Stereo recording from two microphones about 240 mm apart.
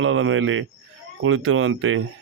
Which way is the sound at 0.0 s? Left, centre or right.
Right.